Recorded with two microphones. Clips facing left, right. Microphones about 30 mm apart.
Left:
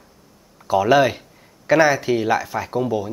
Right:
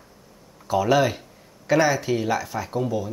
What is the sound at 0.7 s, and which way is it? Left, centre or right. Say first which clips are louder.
Speech: left 4 dB; centre.